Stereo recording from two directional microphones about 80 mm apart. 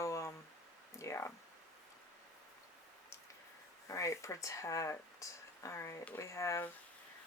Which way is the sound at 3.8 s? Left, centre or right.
Left.